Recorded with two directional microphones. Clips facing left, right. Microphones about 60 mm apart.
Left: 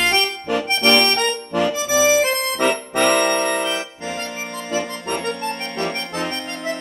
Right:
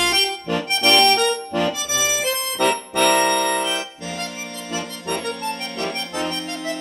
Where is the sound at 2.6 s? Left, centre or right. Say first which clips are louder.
Even; left.